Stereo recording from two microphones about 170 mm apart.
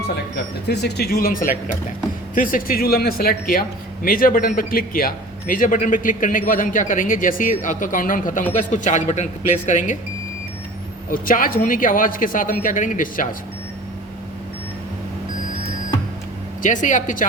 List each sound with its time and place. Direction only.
0.7 s a man's voice: 75° left (ahead or behind); by 10.0 s 45° left (ahead or behind)
11.1 s a man's voice: 55° left (ahead or behind)
16.6 s a man's voice: 50° left (ahead or behind)